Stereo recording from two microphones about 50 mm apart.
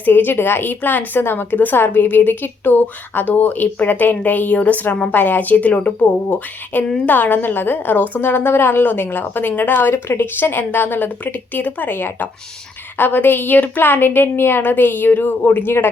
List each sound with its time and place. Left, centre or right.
0.0 s a woman's voice: left
1.2 s a woman's voice: left
5.1 s a woman's voice: left
8.2 s a woman's voice: left